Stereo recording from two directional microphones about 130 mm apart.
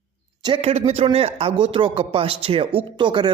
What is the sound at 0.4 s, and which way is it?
A man's voice, 45° right (ahead or behind).